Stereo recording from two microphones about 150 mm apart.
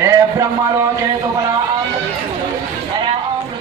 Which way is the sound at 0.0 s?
20° right (ahead or behind).